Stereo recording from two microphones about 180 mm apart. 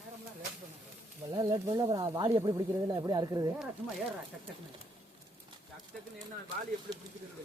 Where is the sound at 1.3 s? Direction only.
20° right (ahead or behind).